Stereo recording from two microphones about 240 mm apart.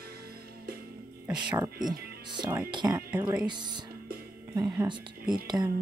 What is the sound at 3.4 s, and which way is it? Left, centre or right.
Speech, centre.